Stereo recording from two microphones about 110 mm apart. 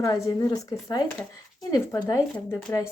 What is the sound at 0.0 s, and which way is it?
Speech, 35° left (ahead or behind).